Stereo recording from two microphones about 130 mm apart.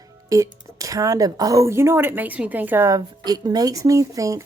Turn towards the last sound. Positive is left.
turn(degrees=-25)  # may be behind; listen again after turning